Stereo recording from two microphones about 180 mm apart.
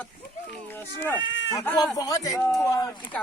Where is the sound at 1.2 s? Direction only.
90° left.